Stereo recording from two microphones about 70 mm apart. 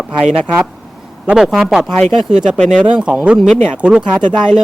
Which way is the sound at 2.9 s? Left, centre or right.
Centre.